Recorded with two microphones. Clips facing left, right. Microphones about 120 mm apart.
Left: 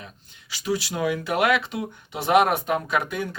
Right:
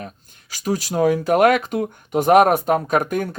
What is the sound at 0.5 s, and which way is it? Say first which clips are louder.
Speech: right 5 dB; 45° right (ahead or behind).